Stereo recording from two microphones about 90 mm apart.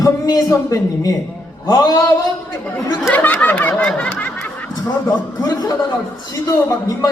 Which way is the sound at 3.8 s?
10° left (ahead or behind).